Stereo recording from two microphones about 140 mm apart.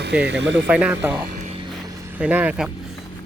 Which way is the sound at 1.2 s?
70° right (ahead or behind).